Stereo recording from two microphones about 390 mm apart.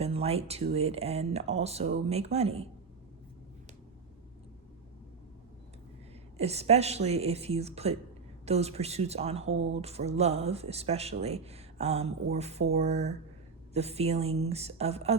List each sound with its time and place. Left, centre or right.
0.0 s speech: centre
6.3 s speech: centre